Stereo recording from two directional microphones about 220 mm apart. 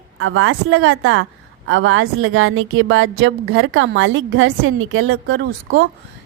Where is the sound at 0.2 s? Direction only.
65° right (ahead or behind).